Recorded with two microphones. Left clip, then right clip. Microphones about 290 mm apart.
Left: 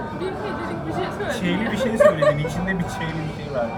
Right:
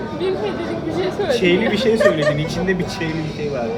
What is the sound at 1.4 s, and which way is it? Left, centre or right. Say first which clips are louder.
Speech: right 7 dB; left.